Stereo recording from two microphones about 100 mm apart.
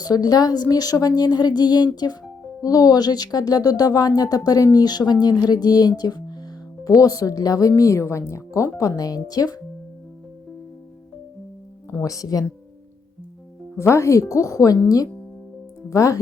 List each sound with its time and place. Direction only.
0.0 s speech: 40° left (ahead or behind)
12.0 s speech: 35° left (ahead or behind)
13.7 s speech: 30° left (ahead or behind)